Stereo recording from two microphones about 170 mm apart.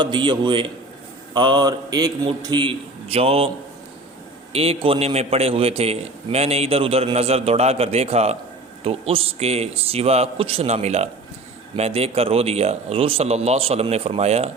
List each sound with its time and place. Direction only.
0.0 s mantra: 30° right (ahead or behind)
2.4 s a man's voice: 25° right (ahead or behind)
4.5 s a man's voice: 35° right (ahead or behind)